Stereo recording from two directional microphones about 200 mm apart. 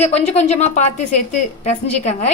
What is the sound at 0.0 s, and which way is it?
A woman's voice, 35° left (ahead or behind).